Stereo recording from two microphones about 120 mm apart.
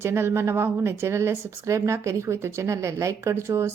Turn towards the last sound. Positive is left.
turn(degrees=-20)  # may be behind; listen again after turning